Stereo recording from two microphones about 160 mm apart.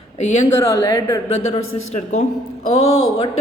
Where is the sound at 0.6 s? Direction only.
20° left (ahead or behind).